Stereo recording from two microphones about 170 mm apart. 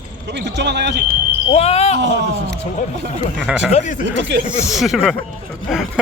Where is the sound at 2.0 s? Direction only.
85° right.